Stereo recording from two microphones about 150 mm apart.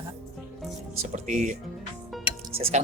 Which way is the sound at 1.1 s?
55° right (ahead or behind).